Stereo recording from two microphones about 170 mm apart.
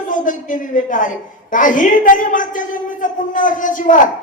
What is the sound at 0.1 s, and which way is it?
A woman's voice, 50° left (ahead or behind).